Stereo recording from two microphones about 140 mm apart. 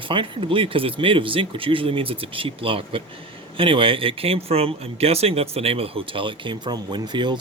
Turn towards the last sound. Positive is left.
turn(degrees=-35)  # may be behind; listen again after turning